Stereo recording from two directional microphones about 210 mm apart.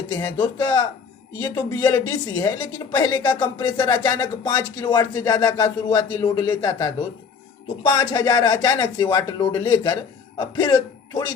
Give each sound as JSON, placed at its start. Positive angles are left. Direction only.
{"t": 0.1, "sound": "a woman's voice", "side_deg": 10}